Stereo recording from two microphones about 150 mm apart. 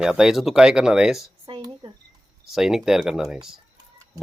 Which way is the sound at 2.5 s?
Centre (ahead or behind).